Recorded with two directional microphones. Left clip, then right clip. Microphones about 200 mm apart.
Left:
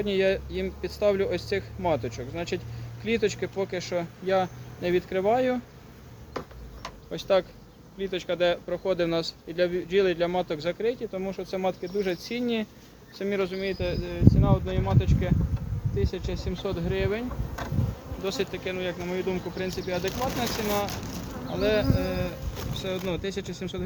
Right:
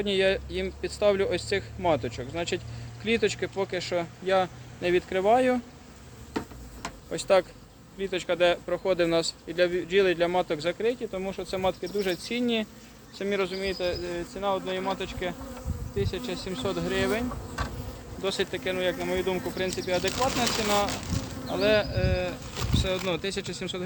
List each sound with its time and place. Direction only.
0.0 s speech: 10° right (ahead or behind)
7.1 s speech: 20° right (ahead or behind); by 23.8 s 5° left (ahead or behind)